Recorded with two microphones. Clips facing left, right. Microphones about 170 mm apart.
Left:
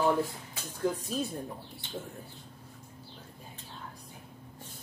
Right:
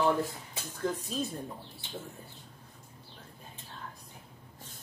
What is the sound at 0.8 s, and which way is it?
Speech, 10° left (ahead or behind).